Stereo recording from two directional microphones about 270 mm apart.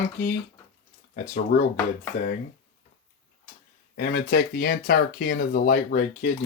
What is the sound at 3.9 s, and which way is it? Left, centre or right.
Speech, left.